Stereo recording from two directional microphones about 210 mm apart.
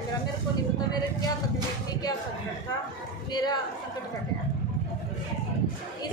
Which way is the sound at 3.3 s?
20° left (ahead or behind).